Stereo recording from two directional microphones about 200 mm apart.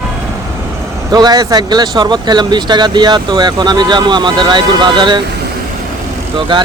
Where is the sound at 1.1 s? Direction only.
20° right (ahead or behind).